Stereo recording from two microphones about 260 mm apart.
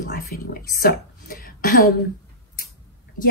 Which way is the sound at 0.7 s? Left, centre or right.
Left.